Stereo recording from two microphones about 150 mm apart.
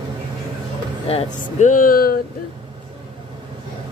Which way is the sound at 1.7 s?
70° left (ahead or behind).